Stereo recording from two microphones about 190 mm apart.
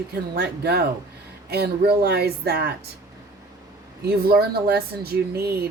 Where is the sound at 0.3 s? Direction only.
60° right (ahead or behind).